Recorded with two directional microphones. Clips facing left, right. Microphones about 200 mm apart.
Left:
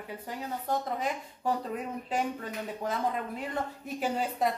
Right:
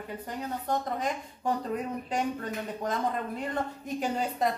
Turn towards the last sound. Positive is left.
turn(degrees=5)  # may be behind; listen again after turning